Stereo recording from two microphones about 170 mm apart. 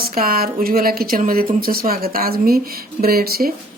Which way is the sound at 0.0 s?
60° right (ahead or behind).